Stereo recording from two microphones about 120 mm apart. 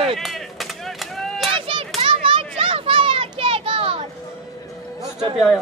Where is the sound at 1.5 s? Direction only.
50° right (ahead or behind).